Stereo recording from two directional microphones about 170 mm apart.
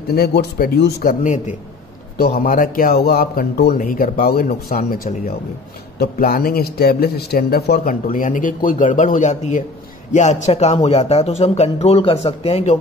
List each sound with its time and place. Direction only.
0.1 s a man's voice: 70° left (ahead or behind)
1.2 s a man's voice: 45° left (ahead or behind)
2.1 s a man's voice: 65° left (ahead or behind); by 12.7 s 40° left (ahead or behind)